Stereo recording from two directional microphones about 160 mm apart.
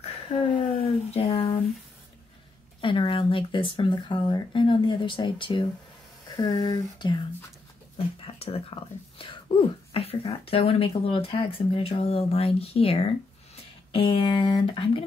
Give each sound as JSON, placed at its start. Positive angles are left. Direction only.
{"t": 0.0, "sound": "speech", "side_deg": 45}
{"t": 2.8, "sound": "speech", "side_deg": 30}
{"t": 8.3, "sound": "speech", "side_deg": 40}